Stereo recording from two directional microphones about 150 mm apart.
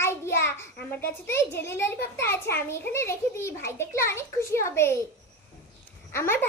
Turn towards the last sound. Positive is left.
turn(degrees=15)  # may be behind; listen again after turning